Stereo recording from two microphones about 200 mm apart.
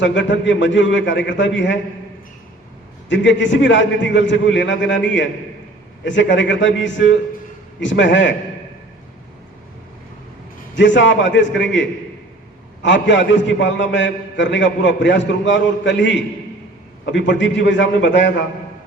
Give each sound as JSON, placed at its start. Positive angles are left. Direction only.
{"t": 0.0, "sound": "a man's voice", "side_deg": 65}
{"t": 3.1, "sound": "a man's voice", "side_deg": 65}
{"t": 10.8, "sound": "a man's voice", "side_deg": 65}